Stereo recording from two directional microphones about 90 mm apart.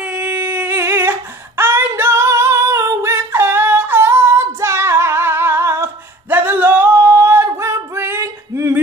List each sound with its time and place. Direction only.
0.0 s singing: 15° right (ahead or behind); by 8.7 s 30° right (ahead or behind)